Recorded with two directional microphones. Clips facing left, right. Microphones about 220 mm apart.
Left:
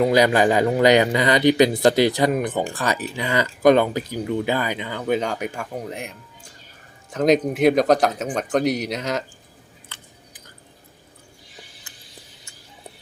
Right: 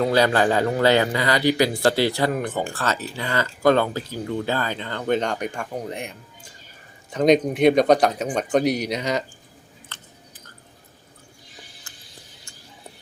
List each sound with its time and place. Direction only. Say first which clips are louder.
0.0 s speech: left 2 dB; 15° left (ahead or behind)
9.9 s chewing: even; 15° left (ahead or behind)